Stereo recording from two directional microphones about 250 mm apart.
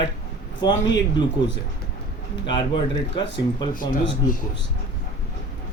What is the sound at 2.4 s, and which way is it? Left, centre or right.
Speech, centre.